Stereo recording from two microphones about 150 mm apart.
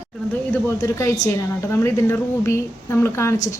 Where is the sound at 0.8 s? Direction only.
20° left (ahead or behind).